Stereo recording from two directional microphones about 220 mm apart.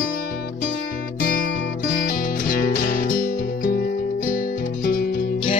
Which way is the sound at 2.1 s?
40° left (ahead or behind).